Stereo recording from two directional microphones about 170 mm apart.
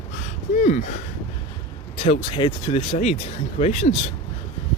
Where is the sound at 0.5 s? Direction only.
45° left (ahead or behind).